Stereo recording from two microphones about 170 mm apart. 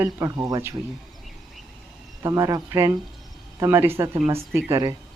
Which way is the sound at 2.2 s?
20° right (ahead or behind).